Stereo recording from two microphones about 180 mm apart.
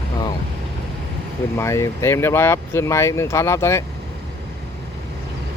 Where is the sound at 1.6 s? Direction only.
15° left (ahead or behind).